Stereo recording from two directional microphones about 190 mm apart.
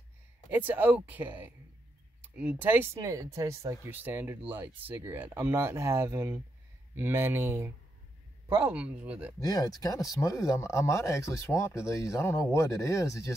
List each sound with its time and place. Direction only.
0.5 s speech: 10° right (ahead or behind)
9.4 s speech: 20° left (ahead or behind)